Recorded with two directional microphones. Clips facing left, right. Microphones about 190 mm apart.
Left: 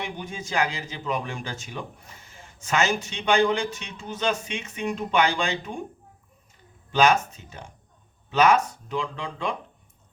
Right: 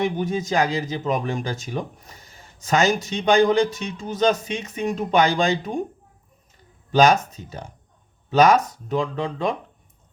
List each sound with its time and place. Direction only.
0.0 s speech: 40° right (ahead or behind)
6.9 s speech: 35° right (ahead or behind)